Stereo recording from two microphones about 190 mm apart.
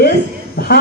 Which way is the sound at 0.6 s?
60° left (ahead or behind).